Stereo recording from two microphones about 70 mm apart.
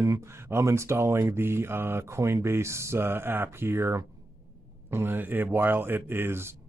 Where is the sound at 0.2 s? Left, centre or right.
Right.